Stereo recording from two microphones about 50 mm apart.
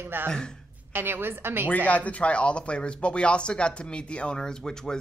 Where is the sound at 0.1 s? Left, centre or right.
Right.